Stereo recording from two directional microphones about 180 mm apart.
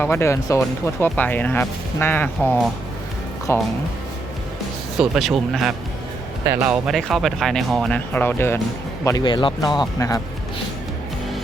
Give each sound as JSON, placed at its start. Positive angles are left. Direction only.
{"t": 0.0, "sound": "speech", "side_deg": 15}
{"t": 4.9, "sound": "speech", "side_deg": 0}
{"t": 9.0, "sound": "speech", "side_deg": 20}